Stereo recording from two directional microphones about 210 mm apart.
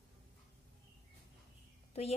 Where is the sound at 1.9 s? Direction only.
30° left (ahead or behind).